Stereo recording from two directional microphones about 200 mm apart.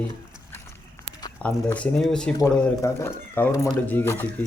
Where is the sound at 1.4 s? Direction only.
5° left (ahead or behind).